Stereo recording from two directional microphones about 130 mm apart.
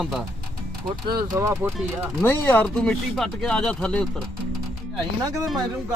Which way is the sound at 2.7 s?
5° left (ahead or behind).